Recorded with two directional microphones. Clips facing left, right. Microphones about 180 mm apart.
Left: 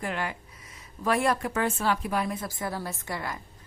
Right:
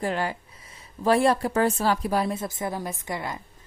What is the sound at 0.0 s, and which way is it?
A woman's voice, 35° right (ahead or behind).